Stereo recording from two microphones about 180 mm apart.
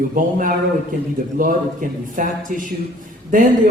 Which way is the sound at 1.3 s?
50° right (ahead or behind).